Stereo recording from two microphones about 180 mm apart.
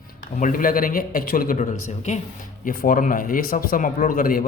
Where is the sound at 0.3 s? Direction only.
50° left (ahead or behind).